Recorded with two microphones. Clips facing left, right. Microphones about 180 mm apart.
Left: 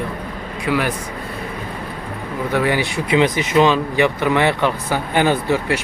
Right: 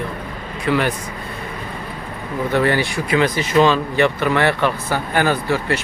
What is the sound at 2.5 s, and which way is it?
Speech, 10° left (ahead or behind).